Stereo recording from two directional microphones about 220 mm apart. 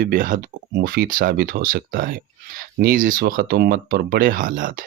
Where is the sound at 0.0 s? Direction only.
40° right (ahead or behind).